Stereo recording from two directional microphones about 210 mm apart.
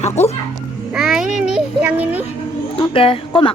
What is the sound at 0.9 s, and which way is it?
A child's voice, centre (ahead or behind).